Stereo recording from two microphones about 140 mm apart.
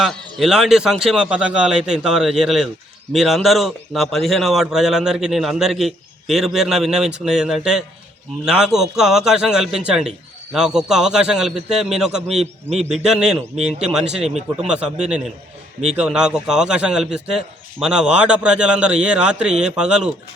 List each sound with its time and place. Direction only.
0.0 s a man's voice: centre (ahead or behind)
14.3 s speech: 50° right (ahead or behind)
14.7 s a man's voice: 5° right (ahead or behind)